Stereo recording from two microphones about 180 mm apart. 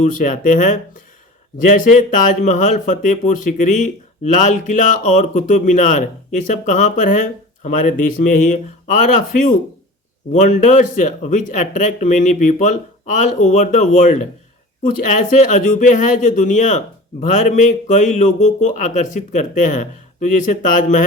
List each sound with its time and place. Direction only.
0.0 s speech: 45° left (ahead or behind)